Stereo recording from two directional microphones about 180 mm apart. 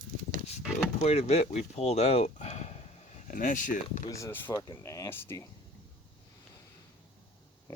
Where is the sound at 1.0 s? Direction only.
40° left (ahead or behind).